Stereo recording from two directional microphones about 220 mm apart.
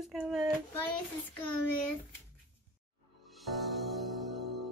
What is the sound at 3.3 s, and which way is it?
Music, centre (ahead or behind).